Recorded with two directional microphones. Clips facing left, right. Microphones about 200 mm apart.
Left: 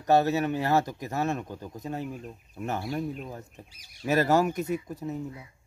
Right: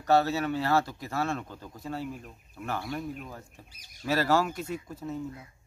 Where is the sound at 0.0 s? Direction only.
15° left (ahead or behind).